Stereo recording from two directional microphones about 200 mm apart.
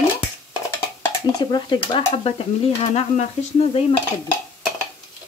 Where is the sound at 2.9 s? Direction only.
30° left (ahead or behind).